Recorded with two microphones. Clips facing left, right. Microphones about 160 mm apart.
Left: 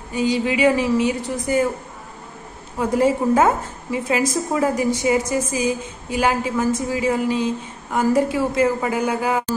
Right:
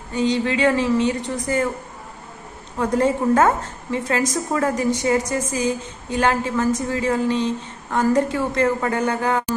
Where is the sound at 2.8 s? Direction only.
10° left (ahead or behind).